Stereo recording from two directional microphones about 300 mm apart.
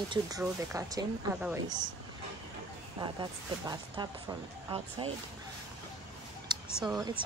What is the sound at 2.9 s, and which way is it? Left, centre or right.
Speech, centre.